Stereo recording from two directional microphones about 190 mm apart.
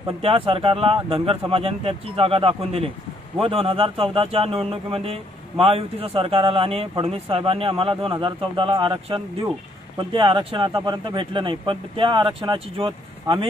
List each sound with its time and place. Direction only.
0.2 s speech: 30° right (ahead or behind)